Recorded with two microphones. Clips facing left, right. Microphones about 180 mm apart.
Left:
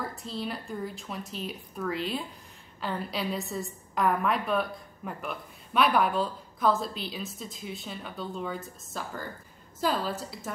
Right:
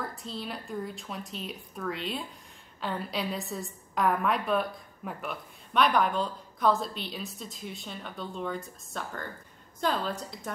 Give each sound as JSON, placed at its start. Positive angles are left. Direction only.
{"t": 0.0, "sound": "a woman's voice", "side_deg": 0}